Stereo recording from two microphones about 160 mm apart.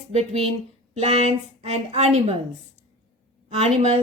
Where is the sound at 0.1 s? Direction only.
40° right (ahead or behind).